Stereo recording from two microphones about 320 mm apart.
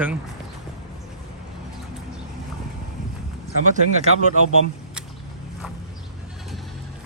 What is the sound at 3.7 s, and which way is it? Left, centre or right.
Speech, right.